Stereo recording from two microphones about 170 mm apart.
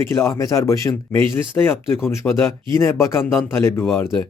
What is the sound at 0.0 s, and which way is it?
Speech, 15° left (ahead or behind).